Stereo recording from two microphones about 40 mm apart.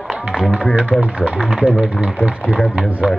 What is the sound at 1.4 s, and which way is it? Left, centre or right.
Speech, centre.